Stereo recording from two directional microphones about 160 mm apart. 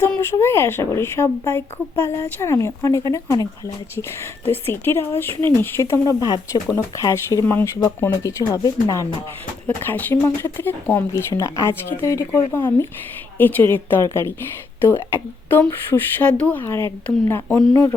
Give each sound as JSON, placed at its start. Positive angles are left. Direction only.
{"t": 0.2, "sound": "speech", "side_deg": 15}
{"t": 4.4, "sound": "speech", "side_deg": 15}